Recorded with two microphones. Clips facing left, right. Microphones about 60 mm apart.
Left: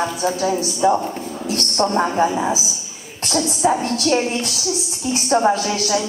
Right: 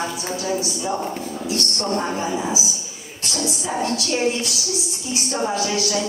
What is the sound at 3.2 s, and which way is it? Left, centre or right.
A woman's voice, left.